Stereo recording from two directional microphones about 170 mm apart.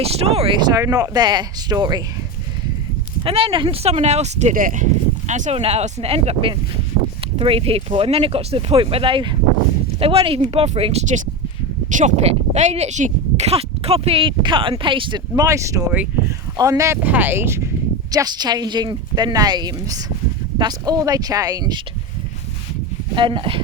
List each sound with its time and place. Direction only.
0.0 s speech: 35° right (ahead or behind)
3.2 s speech: 35° right (ahead or behind)
11.9 s speech: 45° right (ahead or behind); by 15.8 s 20° right (ahead or behind)
15.9 s speech: 10° right (ahead or behind)
16.6 s speech: 20° right (ahead or behind)
23.1 s speech: 30° right (ahead or behind)